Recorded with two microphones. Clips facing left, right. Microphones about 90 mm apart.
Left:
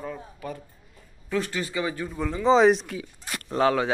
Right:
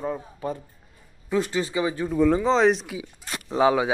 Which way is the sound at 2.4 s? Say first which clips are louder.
Left 2 dB; 5° left (ahead or behind).